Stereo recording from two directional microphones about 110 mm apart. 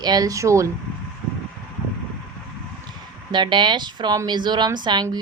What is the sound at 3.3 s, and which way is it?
Speech, 45° right (ahead or behind).